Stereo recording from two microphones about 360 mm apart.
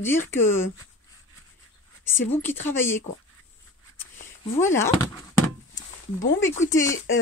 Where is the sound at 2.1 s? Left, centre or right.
Centre.